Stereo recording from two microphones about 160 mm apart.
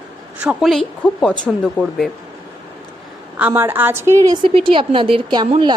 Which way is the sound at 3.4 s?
10° right (ahead or behind).